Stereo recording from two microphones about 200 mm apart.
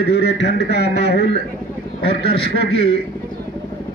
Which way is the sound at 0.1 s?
55° left (ahead or behind).